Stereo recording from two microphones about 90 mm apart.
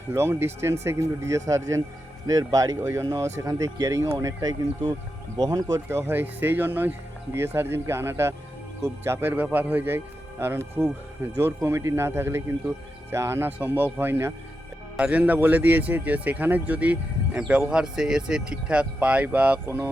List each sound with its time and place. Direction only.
0.1 s speech: 25° right (ahead or behind)
14.9 s speech: 15° right (ahead or behind)